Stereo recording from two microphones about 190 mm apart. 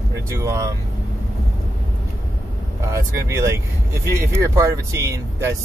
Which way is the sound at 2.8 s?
15° right (ahead or behind).